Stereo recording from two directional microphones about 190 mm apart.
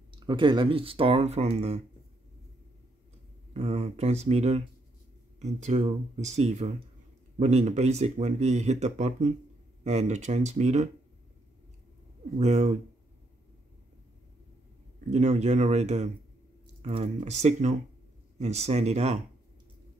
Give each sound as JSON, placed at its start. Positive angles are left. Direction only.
{"t": 0.1, "sound": "speech", "side_deg": -25}
{"t": 3.5, "sound": "speech", "side_deg": -35}
{"t": 12.4, "sound": "speech", "side_deg": -35}
{"t": 15.0, "sound": "speech", "side_deg": -35}